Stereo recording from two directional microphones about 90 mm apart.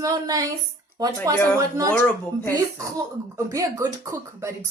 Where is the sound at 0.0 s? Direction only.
40° right (ahead or behind).